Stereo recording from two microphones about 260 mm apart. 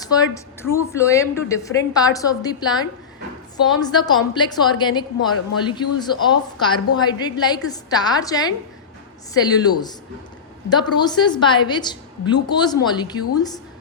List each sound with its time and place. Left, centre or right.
0.0 s a woman's voice: centre